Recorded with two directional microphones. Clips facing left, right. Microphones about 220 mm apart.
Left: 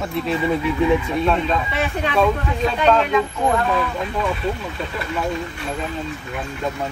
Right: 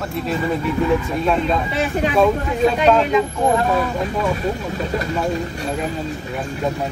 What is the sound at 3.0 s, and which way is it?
Speech, 20° right (ahead or behind).